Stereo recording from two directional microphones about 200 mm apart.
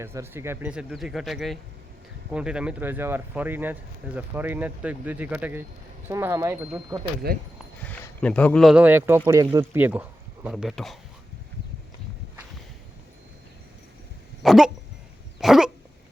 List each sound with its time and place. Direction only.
0.0 s speech: 15° right (ahead or behind)
7.2 s speech: 50° right (ahead or behind)
7.8 s speech: 10° left (ahead or behind)
14.4 s dog: centre (ahead or behind)
15.4 s speech: centre (ahead or behind)